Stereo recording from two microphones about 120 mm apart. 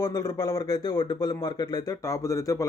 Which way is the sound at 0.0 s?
30° left (ahead or behind).